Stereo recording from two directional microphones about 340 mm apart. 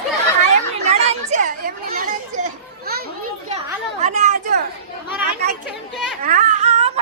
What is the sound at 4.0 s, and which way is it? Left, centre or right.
Chatter, centre.